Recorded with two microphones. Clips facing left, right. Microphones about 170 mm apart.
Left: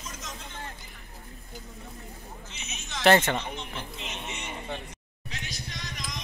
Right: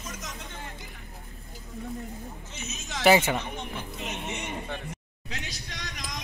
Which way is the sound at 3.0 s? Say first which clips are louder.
Even; 5° right (ahead or behind).